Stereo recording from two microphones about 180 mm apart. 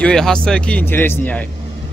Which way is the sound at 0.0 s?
5° left (ahead or behind).